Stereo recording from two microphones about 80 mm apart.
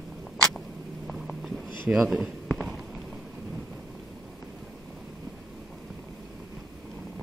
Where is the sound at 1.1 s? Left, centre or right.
Centre.